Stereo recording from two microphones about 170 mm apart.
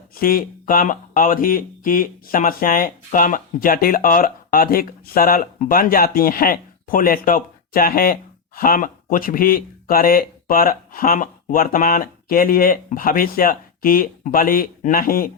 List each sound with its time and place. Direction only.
0.2 s speech: 60° left (ahead or behind)